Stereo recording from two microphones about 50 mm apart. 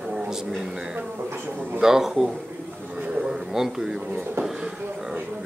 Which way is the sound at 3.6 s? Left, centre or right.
Centre.